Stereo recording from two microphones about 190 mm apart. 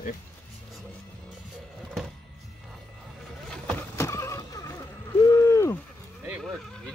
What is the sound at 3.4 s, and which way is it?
Vehicle, 5° left (ahead or behind).